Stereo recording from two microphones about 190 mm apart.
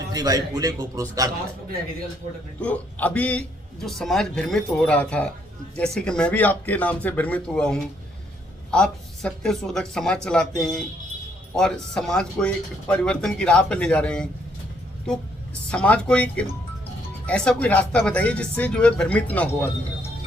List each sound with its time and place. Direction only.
0.1 s a man's voice: 20° right (ahead or behind)
2.6 s speech: 5° left (ahead or behind)
15.7 s speech: 5° left (ahead or behind)